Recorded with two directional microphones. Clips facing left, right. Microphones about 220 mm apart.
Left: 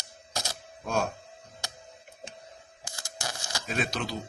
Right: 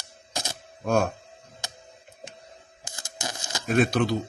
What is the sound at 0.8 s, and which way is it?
Speech, 55° right (ahead or behind).